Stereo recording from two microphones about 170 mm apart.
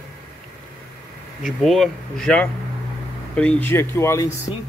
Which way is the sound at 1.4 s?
Centre (ahead or behind).